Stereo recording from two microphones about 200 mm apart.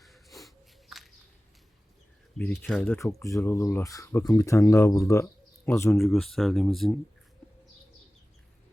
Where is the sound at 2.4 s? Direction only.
5° left (ahead or behind).